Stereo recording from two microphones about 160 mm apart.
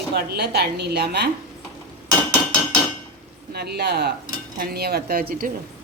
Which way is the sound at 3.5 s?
90° right.